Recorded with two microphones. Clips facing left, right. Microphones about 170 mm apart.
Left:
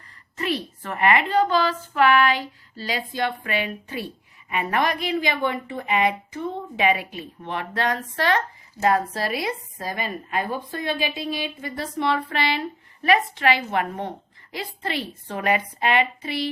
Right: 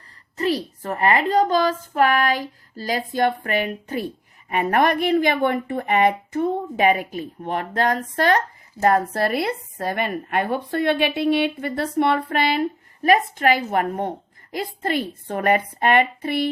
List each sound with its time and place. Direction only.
0.3 s a woman's voice: 35° right (ahead or behind); by 16.5 s 55° right (ahead or behind)